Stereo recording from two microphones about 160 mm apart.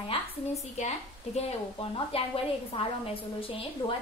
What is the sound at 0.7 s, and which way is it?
A woman's voice, 45° left (ahead or behind).